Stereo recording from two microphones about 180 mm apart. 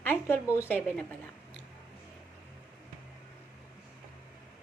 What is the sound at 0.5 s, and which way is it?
Speech, 10° left (ahead or behind).